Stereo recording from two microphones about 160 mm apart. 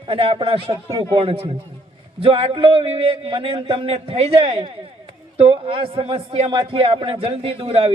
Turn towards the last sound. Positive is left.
turn(degrees=-35)  # may be behind; listen again after turning